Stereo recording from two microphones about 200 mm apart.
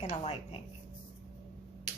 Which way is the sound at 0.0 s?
30° left (ahead or behind).